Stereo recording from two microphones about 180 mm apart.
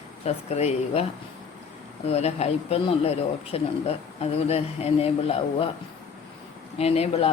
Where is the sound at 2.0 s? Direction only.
35° left (ahead or behind).